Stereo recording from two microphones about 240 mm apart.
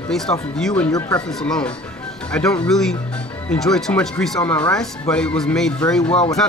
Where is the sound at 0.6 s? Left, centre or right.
Centre.